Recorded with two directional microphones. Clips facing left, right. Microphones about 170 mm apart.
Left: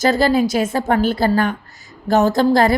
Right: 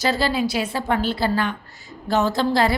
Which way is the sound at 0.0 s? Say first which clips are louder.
Left 6 dB; 45° left (ahead or behind).